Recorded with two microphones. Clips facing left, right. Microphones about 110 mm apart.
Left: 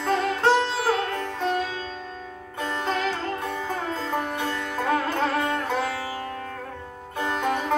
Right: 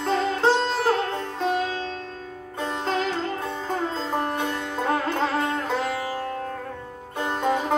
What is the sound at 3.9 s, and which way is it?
Music, 25° right (ahead or behind).